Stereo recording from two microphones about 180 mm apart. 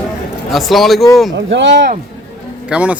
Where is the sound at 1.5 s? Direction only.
85° right.